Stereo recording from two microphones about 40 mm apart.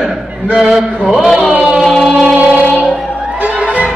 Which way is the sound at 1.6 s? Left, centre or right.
Centre.